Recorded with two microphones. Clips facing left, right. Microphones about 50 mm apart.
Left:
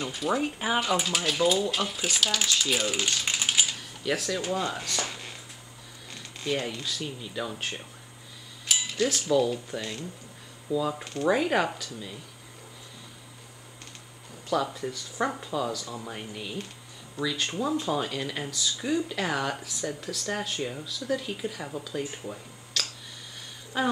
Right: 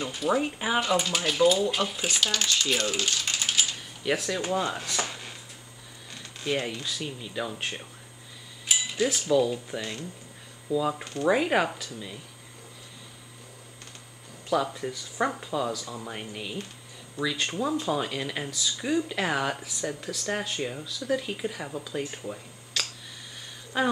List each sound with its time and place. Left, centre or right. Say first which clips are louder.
0.0 s speech: right 1 dB; centre
3.6 s typing: even; centre
4.0 s speech: right 1 dB; centre
6.4 s speech: right 1 dB; centre
8.6 s cutlery: even; centre
10.8 s speech: right 1 dB; centre
14.5 s speech: right 1 dB; centre
22.2 s a sound: right 1 dB; centre
23.7 s speech: right 1 dB; centre